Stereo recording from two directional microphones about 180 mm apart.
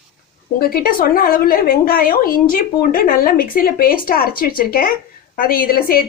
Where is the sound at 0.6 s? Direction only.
55° left (ahead or behind).